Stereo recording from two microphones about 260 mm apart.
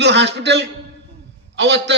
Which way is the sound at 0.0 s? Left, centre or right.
Right.